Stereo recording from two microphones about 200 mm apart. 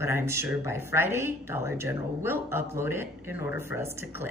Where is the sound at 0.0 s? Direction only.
10° right (ahead or behind).